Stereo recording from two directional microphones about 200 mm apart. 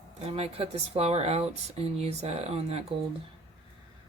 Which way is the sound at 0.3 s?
30° right (ahead or behind).